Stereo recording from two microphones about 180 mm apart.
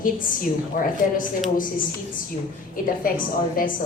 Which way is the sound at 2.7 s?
50° left (ahead or behind).